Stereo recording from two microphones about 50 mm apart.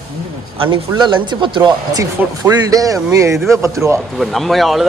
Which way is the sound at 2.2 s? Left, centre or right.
Right.